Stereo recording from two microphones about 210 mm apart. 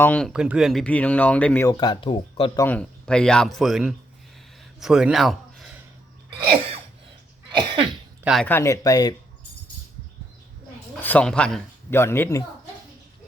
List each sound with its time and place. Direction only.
0.0 s speech: 5° left (ahead or behind); by 2.6 s 25° left (ahead or behind)
2.6 s speech: 5° left (ahead or behind)
6.5 s sneeze: 30° right (ahead or behind)
8.2 s speech: centre (ahead or behind); by 9.1 s 15° left (ahead or behind)
11.0 s speech: 5° left (ahead or behind)